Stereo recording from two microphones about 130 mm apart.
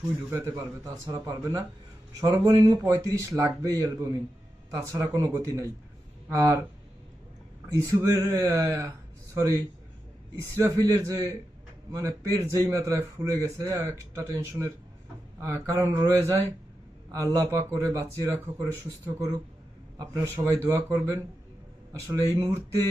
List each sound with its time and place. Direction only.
0.3 s a man's voice: 20° right (ahead or behind)
7.7 s a man's voice: 25° right (ahead or behind)
10.6 s a man's voice: 25° right (ahead or behind)